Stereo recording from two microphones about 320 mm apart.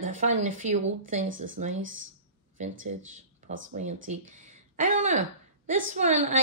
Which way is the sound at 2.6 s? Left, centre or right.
Right.